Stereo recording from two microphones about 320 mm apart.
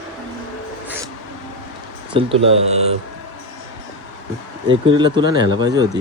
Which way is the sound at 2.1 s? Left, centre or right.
Centre.